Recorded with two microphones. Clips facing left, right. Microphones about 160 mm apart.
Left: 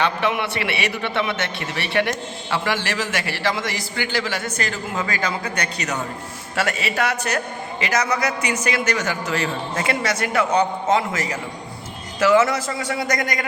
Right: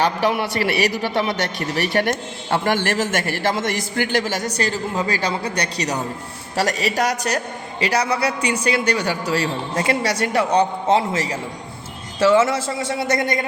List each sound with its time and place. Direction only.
0.0 s a man's voice: 40° right (ahead or behind)